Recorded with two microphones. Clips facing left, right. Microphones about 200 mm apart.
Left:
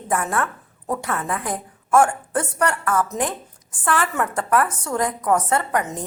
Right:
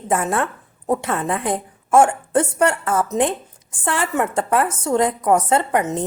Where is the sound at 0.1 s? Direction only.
25° right (ahead or behind).